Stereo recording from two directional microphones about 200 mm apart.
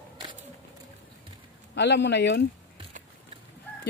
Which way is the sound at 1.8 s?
60° left (ahead or behind).